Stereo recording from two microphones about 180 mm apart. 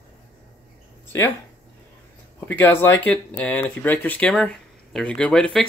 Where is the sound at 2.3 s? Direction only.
10° left (ahead or behind).